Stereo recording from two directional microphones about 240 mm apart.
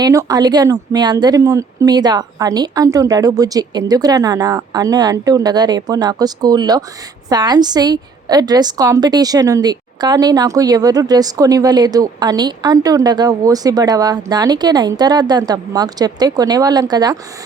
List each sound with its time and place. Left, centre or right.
0.0 s a woman's voice: centre